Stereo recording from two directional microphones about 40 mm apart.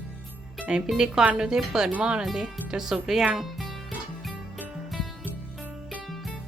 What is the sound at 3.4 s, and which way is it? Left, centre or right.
Music, centre.